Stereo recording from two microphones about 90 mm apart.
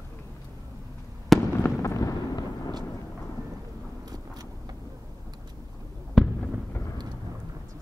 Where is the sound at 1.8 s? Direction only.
40° left (ahead or behind).